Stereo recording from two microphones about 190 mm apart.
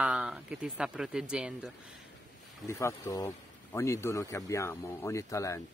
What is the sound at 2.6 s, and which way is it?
Speech, 15° left (ahead or behind).